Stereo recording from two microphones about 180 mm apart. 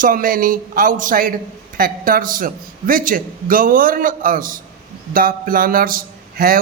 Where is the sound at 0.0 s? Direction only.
50° right (ahead or behind).